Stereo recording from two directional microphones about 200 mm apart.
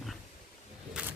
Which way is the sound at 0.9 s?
5° right (ahead or behind).